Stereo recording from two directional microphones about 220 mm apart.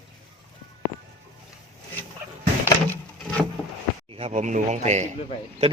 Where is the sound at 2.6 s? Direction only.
10° left (ahead or behind).